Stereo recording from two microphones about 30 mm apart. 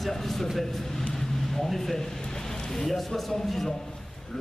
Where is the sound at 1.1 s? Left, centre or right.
Centre.